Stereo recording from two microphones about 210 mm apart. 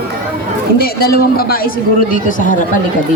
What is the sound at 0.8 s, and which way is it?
Speech, 45° left (ahead or behind).